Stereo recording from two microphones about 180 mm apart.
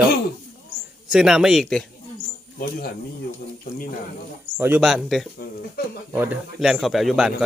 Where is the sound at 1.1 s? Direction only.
5° right (ahead or behind).